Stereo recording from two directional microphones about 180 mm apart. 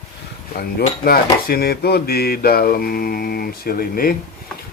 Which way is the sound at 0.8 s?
55° left (ahead or behind).